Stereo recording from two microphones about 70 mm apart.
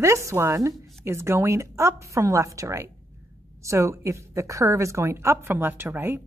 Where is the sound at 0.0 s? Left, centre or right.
Right.